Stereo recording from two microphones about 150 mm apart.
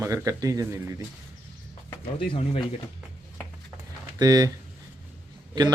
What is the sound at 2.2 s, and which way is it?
Speech, 40° left (ahead or behind).